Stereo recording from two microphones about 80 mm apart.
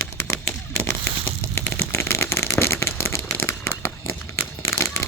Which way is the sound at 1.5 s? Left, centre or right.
Left.